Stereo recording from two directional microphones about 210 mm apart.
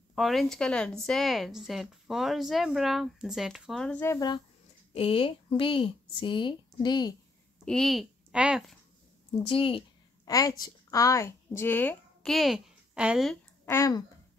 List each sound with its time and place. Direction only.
0.1 s a woman's voice: centre (ahead or behind)
4.9 s speech: 25° left (ahead or behind)
7.6 s speech: centre (ahead or behind)
9.5 s a sound: 25° left (ahead or behind)
10.6 s a woman's voice: 15° left (ahead or behind); by 13.4 s 5° right (ahead or behind)
13.7 s speech: 15° left (ahead or behind)